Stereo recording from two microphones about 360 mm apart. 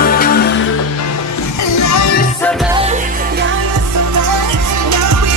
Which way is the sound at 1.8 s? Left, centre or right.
Left.